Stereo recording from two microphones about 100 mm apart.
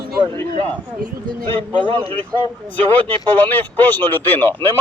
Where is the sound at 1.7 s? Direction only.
55° right (ahead or behind).